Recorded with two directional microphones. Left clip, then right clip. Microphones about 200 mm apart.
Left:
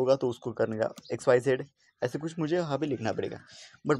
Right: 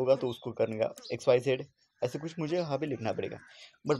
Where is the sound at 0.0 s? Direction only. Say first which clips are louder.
Left 2 dB; 20° left (ahead or behind).